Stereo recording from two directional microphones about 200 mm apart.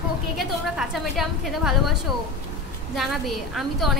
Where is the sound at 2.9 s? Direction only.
Centre (ahead or behind).